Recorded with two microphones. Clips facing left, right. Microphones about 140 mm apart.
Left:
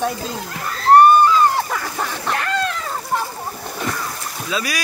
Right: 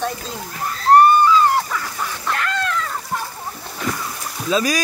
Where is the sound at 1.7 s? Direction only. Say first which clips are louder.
Left 2 dB; 55° left (ahead or behind).